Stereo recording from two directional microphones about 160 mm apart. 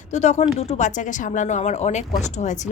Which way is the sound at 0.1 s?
45° left (ahead or behind).